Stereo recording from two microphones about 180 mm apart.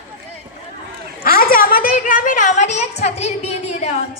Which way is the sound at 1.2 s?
50° left (ahead or behind).